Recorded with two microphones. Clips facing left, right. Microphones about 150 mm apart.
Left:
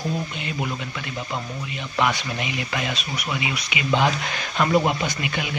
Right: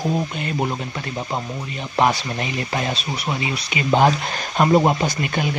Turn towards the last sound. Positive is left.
turn(degrees=-40)  # may be behind; listen again after turning